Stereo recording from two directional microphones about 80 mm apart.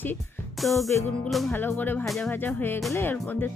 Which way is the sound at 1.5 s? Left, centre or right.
Left.